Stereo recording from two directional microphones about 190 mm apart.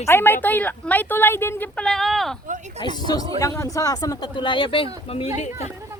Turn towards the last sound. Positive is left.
turn(degrees=30)  # may be behind; listen again after turning